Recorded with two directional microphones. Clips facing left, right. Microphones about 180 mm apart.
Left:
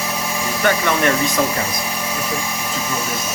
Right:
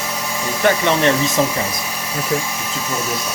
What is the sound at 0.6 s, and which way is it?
Speech, 25° right (ahead or behind).